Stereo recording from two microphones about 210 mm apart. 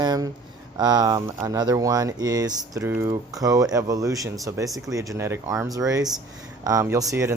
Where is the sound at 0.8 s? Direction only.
20° right (ahead or behind).